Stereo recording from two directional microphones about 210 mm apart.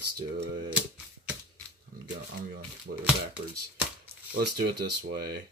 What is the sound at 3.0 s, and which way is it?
Speech, 5° right (ahead or behind).